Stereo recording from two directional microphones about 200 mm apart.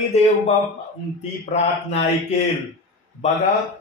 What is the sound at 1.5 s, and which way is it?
Mantra, 35° left (ahead or behind).